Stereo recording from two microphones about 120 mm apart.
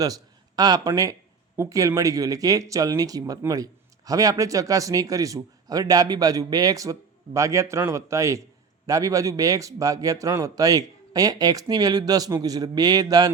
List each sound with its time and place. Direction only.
0.0 s a man's voice: 35° right (ahead or behind)